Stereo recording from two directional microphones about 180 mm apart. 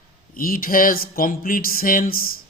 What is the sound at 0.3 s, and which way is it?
A man's voice, 50° left (ahead or behind).